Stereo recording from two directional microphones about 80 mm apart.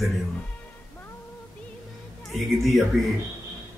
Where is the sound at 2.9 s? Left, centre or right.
Centre.